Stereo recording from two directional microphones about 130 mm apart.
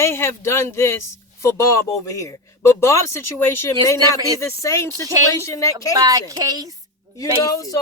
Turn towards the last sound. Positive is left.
turn(degrees=25)  # may be behind; listen again after turning